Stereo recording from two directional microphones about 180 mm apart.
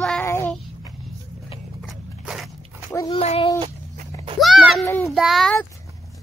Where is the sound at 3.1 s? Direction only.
35° left (ahead or behind).